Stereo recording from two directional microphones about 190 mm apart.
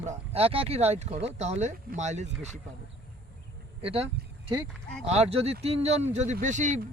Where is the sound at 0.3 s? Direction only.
30° right (ahead or behind).